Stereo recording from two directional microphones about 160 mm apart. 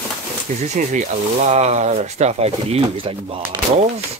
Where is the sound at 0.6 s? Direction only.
45° right (ahead or behind).